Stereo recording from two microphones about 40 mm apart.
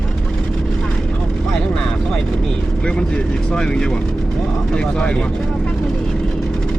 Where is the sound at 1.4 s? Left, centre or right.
Centre.